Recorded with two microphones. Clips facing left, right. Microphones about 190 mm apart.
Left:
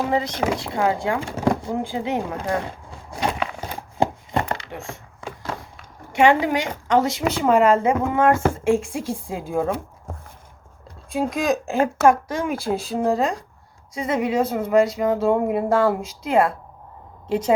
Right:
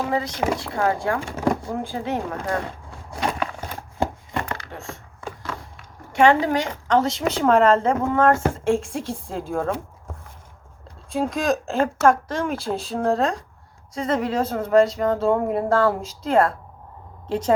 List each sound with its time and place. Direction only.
0.1 s a woman's voice: 20° left (ahead or behind)
4.5 s a sound: 20° left (ahead or behind)
6.1 s a woman's voice: 15° left (ahead or behind)
11.1 s a woman's voice: 10° left (ahead or behind)